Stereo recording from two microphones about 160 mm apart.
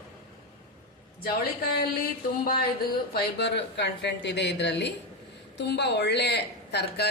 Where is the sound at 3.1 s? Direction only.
90° left.